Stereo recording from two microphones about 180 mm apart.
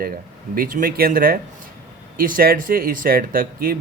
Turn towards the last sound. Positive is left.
turn(degrees=-50)  # may be behind; listen again after turning